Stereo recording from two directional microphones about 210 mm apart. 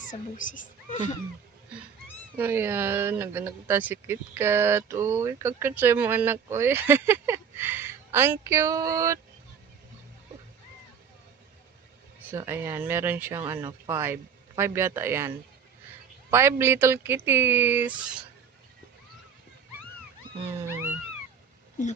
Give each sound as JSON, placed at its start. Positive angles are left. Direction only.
{"t": 0.0, "sound": "speech", "side_deg": 40}
{"t": 2.3, "sound": "speech", "side_deg": -10}
{"t": 12.3, "sound": "speech", "side_deg": -10}
{"t": 16.3, "sound": "speech", "side_deg": -10}
{"t": 20.5, "sound": "wild animals", "side_deg": -10}